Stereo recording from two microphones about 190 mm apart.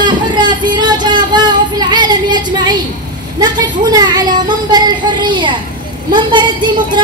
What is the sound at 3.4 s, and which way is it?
Speech, 20° right (ahead or behind).